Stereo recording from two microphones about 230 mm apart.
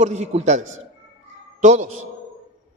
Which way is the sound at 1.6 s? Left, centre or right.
Right.